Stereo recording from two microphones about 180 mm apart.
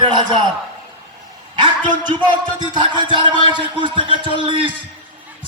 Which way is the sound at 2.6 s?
25° right (ahead or behind).